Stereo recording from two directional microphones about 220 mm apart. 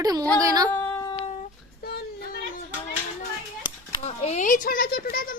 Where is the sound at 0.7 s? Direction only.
10° left (ahead or behind).